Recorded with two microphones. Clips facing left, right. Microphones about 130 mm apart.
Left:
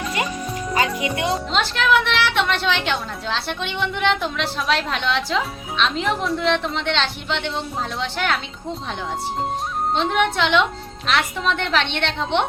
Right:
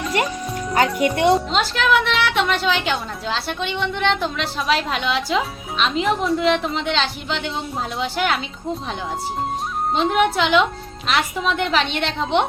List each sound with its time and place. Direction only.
0.9 s a woman's voice: centre (ahead or behind)